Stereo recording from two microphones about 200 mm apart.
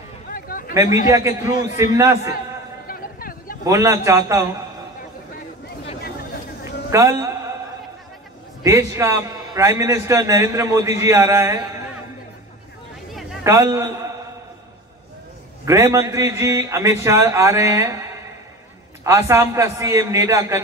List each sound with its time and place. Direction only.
0.3 s a sound: 45° left (ahead or behind)
1.0 s a man's voice: 15° right (ahead or behind)
2.9 s a sound: 45° left (ahead or behind)
3.6 s a man's voice: 15° right (ahead or behind)
6.9 s a man's voice: 15° right (ahead or behind)
8.6 s a man's voice: 15° right (ahead or behind)
13.1 s a sound: centre (ahead or behind)
13.4 s a man's voice: 15° right (ahead or behind)
15.6 s a man's voice: 15° right (ahead or behind)